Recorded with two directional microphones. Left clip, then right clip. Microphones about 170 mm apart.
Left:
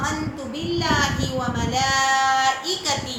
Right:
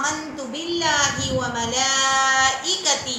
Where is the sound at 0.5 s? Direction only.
5° right (ahead or behind).